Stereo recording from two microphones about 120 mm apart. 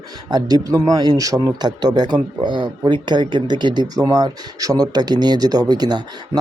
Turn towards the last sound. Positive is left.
turn(degrees=-35)  # may be behind; listen again after turning